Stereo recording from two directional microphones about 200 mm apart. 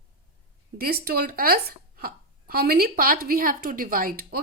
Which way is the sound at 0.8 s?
50° right (ahead or behind).